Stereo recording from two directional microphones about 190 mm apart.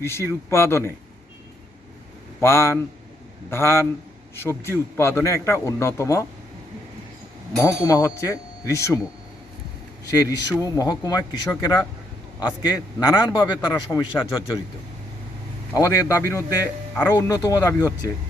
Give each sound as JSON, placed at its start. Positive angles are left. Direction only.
{"t": 0.0, "sound": "a man's voice", "side_deg": 15}
{"t": 2.4, "sound": "a man's voice", "side_deg": 15}
{"t": 7.5, "sound": "a man's voice", "side_deg": 15}
{"t": 10.1, "sound": "a man's voice", "side_deg": 15}
{"t": 15.7, "sound": "a man's voice", "side_deg": 15}